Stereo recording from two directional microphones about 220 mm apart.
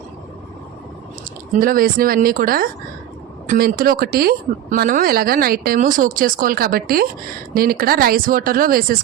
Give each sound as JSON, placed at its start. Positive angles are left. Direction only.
{"t": 1.5, "sound": "a woman's voice", "side_deg": -40}